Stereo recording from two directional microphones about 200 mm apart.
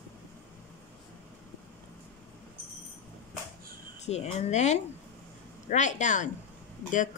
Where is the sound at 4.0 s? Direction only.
35° left (ahead or behind).